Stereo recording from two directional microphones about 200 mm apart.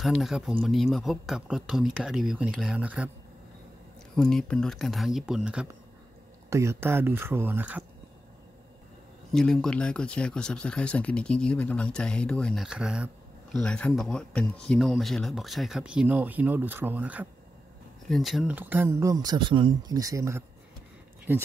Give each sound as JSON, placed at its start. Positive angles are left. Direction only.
{"t": 0.0, "sound": "speech", "side_deg": 0}
{"t": 4.2, "sound": "speech", "side_deg": 5}
{"t": 9.3, "sound": "speech", "side_deg": 5}